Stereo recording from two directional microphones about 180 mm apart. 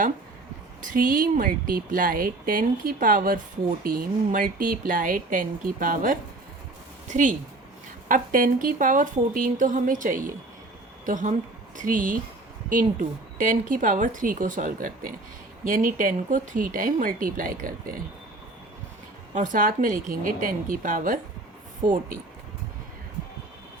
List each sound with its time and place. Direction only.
0.9 s a woman's voice: 50° right (ahead or behind)
13.4 s speech: 50° right (ahead or behind)
19.3 s speech: 45° right (ahead or behind)